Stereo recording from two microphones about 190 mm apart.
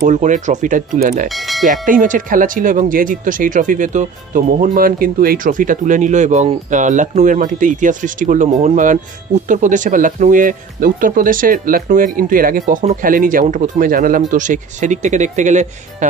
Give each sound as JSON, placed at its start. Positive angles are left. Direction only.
{"t": 0.0, "sound": "speech", "side_deg": -40}
{"t": 1.3, "sound": "speech", "side_deg": 0}
{"t": 1.7, "sound": "speech", "side_deg": -45}